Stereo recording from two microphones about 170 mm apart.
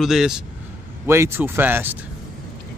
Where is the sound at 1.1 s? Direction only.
15° right (ahead or behind).